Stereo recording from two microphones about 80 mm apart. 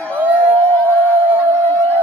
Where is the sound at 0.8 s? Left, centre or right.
Left.